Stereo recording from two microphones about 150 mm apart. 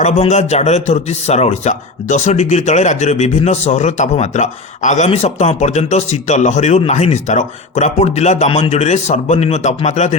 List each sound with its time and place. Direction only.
0.0 s speech: 50° left (ahead or behind)